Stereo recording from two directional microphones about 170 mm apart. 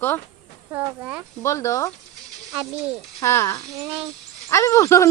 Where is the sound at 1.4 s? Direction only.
15° left (ahead or behind).